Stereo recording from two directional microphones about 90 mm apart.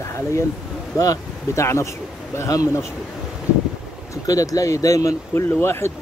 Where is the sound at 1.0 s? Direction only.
35° left (ahead or behind).